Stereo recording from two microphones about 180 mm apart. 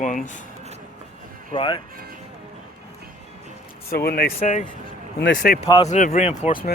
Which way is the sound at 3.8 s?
60° left (ahead or behind).